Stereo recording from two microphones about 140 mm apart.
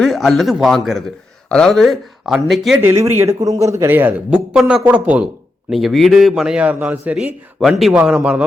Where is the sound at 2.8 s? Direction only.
20° right (ahead or behind).